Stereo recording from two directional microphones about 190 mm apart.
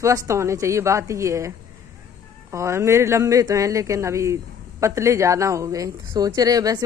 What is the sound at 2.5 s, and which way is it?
A man's voice, 15° right (ahead or behind).